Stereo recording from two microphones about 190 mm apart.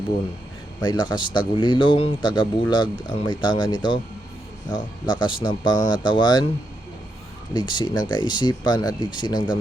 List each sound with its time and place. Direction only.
0.8 s a man's voice: 25° left (ahead or behind)
5.0 s a man's voice: 25° left (ahead or behind)
7.5 s a man's voice: 25° left (ahead or behind)